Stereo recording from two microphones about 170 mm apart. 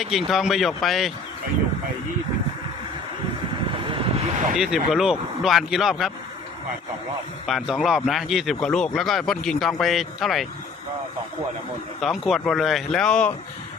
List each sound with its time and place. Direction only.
0.0 s speech: centre (ahead or behind)
3.8 s vehicle: 30° right (ahead or behind)
4.5 s speech: centre (ahead or behind)
7.4 s speech: centre (ahead or behind)
11.9 s speech: centre (ahead or behind)